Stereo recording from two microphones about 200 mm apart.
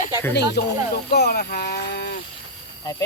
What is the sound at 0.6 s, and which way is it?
Speech, 55° left (ahead or behind).